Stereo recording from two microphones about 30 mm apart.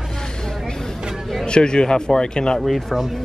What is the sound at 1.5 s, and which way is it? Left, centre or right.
Speech, left.